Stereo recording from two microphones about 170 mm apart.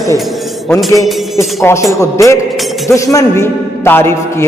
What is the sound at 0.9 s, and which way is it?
Speech, centre (ahead or behind).